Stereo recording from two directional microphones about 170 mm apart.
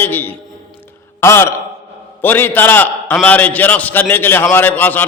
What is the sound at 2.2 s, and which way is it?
A man's voice, 10° left (ahead or behind).